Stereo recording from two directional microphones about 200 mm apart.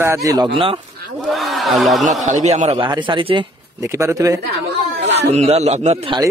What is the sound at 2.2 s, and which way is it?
Speech, 35° right (ahead or behind).